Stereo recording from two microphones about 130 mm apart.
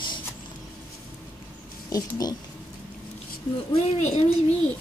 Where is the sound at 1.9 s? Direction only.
30° left (ahead or behind).